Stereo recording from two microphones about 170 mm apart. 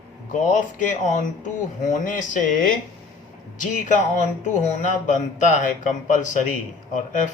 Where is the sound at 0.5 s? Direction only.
45° left (ahead or behind).